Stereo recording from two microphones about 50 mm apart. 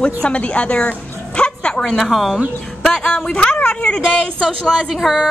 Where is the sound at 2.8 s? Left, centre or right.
Centre.